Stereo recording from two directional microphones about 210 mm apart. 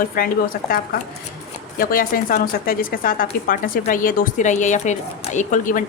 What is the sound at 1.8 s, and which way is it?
A woman's voice, 45° left (ahead or behind).